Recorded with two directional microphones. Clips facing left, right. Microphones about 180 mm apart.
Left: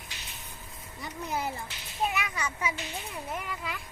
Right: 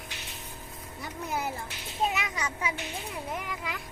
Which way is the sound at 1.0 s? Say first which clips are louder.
Even; 5° right (ahead or behind).